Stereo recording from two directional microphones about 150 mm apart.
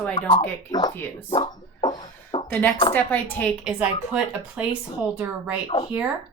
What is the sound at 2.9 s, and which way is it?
Speech, 10° left (ahead or behind).